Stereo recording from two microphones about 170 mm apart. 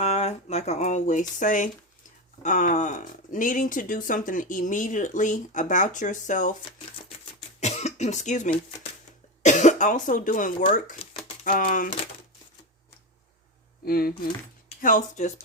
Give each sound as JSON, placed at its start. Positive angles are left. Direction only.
{"t": 0.0, "sound": "a sound", "side_deg": 40}
{"t": 2.4, "sound": "speech", "side_deg": 50}
{"t": 7.6, "sound": "speech", "side_deg": 40}
{"t": 13.8, "sound": "speech", "side_deg": 65}
{"t": 14.8, "sound": "speech", "side_deg": 50}